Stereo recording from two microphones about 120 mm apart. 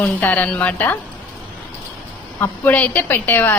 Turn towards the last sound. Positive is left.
turn(degrees=15)  # may be behind; listen again after turning